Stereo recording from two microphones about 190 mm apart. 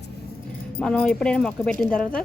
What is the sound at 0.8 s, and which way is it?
Speech, 5° left (ahead or behind).